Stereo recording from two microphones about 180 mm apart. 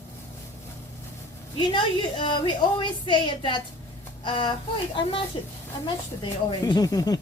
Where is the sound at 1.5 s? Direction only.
25° left (ahead or behind).